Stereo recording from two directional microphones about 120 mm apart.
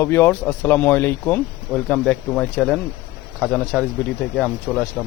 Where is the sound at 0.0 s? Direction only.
20° left (ahead or behind).